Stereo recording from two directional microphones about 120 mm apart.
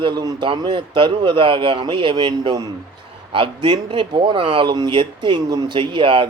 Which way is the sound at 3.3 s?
45° right (ahead or behind).